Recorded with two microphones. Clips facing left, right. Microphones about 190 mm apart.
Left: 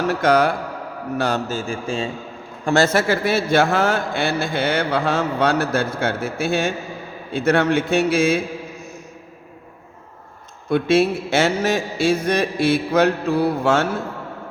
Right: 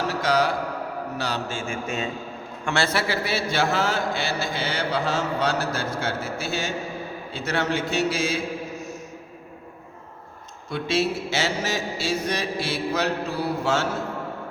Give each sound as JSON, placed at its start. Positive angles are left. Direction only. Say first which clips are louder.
{"t": 0.1, "sound": "a man's voice", "louder": "left 6 dB", "side_deg": 55}
{"t": 2.6, "sound": "a man's voice", "louder": "left 8 dB", "side_deg": 45}
{"t": 10.7, "sound": "a man's voice", "louder": "left 8 dB", "side_deg": 55}